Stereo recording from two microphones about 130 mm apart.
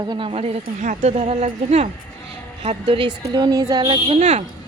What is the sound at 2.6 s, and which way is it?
Speech, 45° right (ahead or behind).